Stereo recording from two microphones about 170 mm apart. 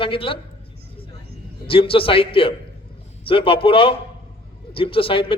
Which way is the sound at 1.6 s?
30° left (ahead or behind).